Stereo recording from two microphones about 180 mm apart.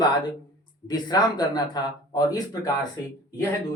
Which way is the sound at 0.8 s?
20° left (ahead or behind).